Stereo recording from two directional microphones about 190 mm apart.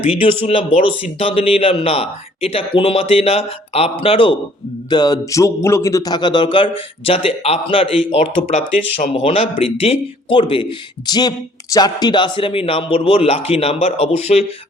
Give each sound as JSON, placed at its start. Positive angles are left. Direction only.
{"t": 0.4, "sound": "speech", "side_deg": 30}